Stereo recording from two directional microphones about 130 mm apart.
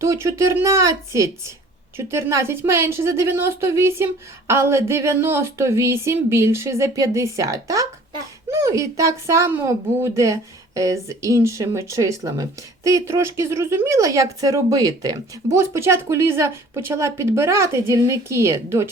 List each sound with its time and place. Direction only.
0.0 s speech: 25° right (ahead or behind)